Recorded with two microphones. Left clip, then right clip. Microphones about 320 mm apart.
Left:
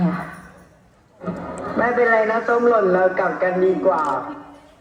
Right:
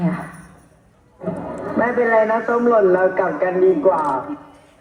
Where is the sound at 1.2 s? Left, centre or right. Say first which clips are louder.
Right 2 dB; right.